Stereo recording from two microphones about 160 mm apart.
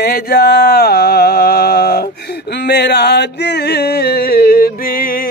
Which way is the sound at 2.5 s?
90° left.